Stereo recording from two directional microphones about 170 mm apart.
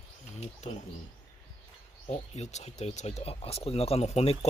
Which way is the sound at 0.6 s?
40° left (ahead or behind).